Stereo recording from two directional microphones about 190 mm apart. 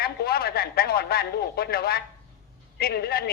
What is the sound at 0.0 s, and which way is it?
Radio, 55° left (ahead or behind).